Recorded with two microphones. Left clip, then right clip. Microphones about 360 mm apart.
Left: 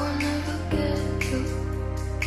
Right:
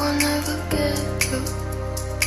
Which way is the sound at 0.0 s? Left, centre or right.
Right.